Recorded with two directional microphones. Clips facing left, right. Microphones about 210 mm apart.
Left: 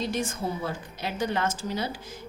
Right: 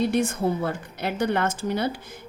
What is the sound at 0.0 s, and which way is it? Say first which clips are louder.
Speech: right 7 dB; 60° right (ahead or behind).